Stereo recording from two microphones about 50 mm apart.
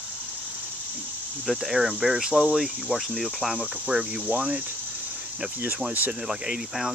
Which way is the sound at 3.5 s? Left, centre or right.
Right.